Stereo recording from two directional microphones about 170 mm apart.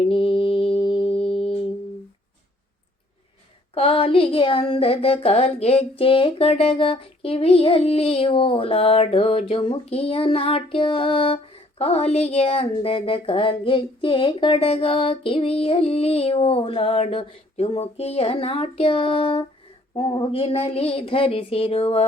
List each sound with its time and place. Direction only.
0.0 s mantra: 35° left (ahead or behind)
3.8 s speech: 35° left (ahead or behind)